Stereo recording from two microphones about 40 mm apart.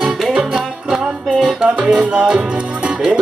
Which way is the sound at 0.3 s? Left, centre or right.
Centre.